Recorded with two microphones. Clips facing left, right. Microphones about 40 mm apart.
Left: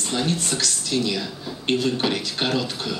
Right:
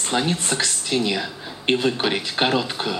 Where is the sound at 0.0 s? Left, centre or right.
Right.